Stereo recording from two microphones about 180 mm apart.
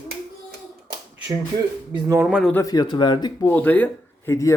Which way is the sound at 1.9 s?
20° right (ahead or behind).